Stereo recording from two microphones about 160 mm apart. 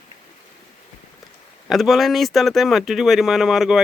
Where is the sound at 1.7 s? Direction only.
Centre (ahead or behind).